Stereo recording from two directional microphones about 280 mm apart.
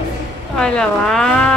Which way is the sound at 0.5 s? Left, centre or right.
Centre.